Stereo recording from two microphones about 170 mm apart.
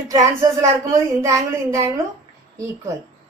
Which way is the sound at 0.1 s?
20° right (ahead or behind).